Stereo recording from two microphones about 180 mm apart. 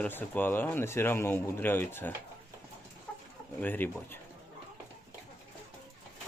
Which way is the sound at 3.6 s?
10° left (ahead or behind).